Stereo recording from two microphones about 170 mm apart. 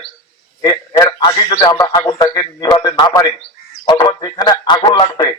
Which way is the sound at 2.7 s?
25° left (ahead or behind).